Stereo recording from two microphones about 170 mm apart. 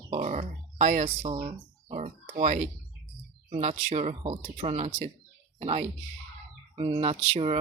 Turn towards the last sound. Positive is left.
turn(degrees=-35)  # may be behind; listen again after turning